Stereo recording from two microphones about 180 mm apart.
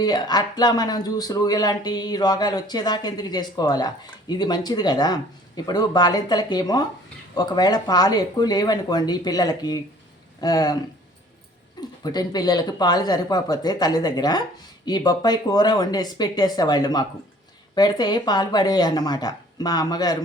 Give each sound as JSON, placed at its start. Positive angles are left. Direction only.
{"t": 0.0, "sound": "speech", "side_deg": 20}
{"t": 11.8, "sound": "speech", "side_deg": 20}